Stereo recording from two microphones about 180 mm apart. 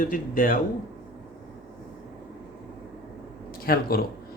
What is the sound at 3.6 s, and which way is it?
Speech, 55° left (ahead or behind).